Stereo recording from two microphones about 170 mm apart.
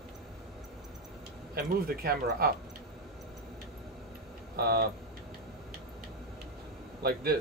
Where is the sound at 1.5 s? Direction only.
65° right (ahead or behind).